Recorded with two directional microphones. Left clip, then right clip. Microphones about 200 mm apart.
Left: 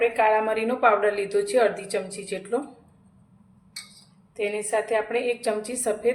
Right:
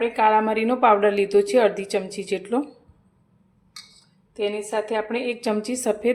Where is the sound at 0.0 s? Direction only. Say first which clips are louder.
Right 2 dB; 40° right (ahead or behind).